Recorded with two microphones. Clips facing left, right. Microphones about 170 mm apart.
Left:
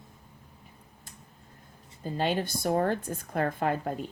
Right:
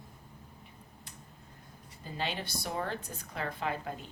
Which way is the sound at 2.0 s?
45° left (ahead or behind).